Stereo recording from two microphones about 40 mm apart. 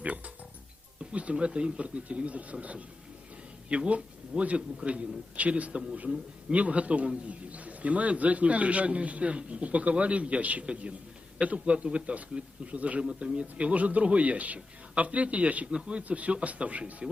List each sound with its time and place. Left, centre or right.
1.1 s a man's voice: right